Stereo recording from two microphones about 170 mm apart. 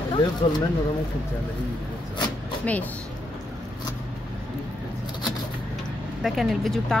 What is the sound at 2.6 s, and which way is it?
Speech, 10° left (ahead or behind).